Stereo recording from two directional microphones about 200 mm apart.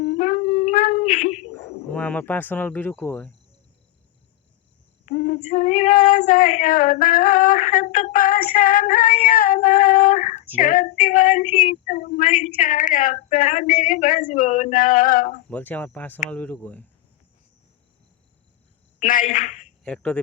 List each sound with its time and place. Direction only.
0.2 s a sound: 40° left (ahead or behind)
1.5 s speech: 10° left (ahead or behind)
5.1 s female singing: 50° left (ahead or behind)
15.4 s speech: 10° left (ahead or behind)
18.9 s a woman's voice: 40° left (ahead or behind)
19.8 s speech: 5° left (ahead or behind)